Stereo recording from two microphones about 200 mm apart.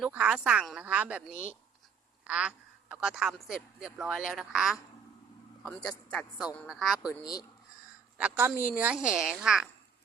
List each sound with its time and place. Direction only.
0.0 s speech: 5° right (ahead or behind)
6.1 s speech: 5° left (ahead or behind)
7.1 s speech: 20° left (ahead or behind)
8.2 s speech: 10° right (ahead or behind)